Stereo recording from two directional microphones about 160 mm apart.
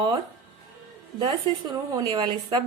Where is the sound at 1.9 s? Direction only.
25° right (ahead or behind).